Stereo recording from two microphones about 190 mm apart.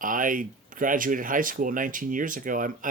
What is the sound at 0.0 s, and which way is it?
Speech, 45° right (ahead or behind).